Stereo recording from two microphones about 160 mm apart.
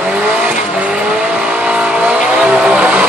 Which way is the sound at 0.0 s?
5° right (ahead or behind).